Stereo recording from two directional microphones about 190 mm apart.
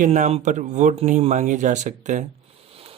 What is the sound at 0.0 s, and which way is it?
Speech, 40° right (ahead or behind).